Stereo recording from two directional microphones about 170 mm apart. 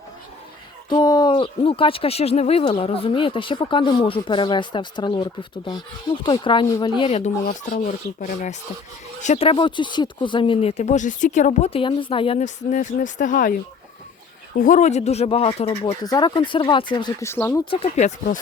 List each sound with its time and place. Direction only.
0.9 s speech: 25° left (ahead or behind)
7.4 s speech: 50° left (ahead or behind)
9.5 s speech: 30° left (ahead or behind)
12.7 s speech: 50° left (ahead or behind)
14.6 s speech: 50° left (ahead or behind)
16.0 s speech: 25° left (ahead or behind)
17.2 s speech: 15° left (ahead or behind)
17.7 s speech: 35° left (ahead or behind)